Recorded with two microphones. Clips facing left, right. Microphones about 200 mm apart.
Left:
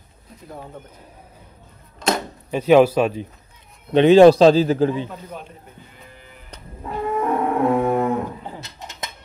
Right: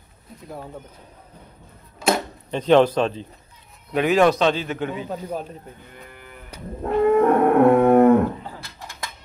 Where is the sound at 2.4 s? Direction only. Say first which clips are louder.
Left 2 dB; 10° left (ahead or behind).